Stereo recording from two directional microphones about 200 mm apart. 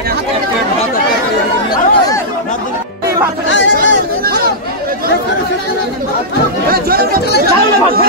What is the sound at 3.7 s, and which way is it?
Chatter, 50° right (ahead or behind).